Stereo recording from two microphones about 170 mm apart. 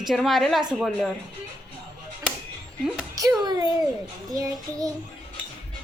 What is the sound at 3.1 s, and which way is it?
Speech, 20° right (ahead or behind).